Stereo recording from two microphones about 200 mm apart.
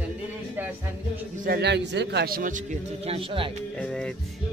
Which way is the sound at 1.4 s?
55° right (ahead or behind).